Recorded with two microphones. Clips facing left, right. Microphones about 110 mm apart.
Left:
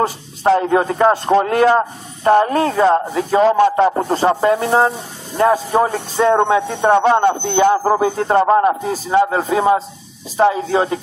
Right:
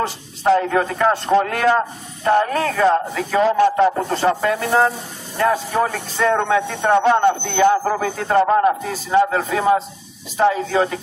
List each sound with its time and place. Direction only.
0.6 s speech: 25° left (ahead or behind)